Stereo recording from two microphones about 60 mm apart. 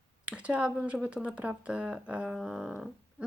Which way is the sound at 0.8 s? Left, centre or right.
Centre.